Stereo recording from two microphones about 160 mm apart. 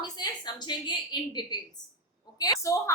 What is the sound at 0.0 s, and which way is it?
A woman's voice, 25° left (ahead or behind).